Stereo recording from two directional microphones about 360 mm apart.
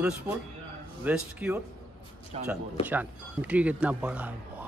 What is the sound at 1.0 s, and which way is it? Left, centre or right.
Speech, centre.